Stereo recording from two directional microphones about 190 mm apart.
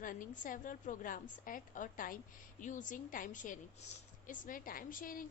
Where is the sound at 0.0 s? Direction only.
45° left (ahead or behind).